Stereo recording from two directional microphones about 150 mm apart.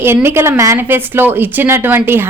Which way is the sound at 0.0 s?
15° right (ahead or behind).